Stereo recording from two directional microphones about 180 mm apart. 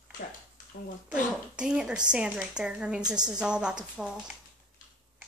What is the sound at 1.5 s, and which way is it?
A woman's voice, 5° right (ahead or behind).